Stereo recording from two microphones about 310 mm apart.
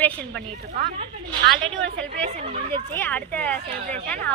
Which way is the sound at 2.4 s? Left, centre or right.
Centre.